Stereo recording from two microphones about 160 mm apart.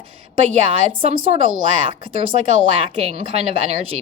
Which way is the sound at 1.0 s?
35° right (ahead or behind).